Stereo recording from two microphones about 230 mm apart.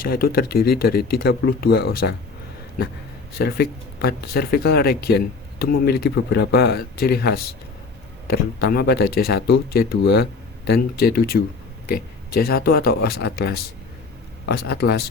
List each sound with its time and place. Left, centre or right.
0.0 s speech: left
3.3 s speech: left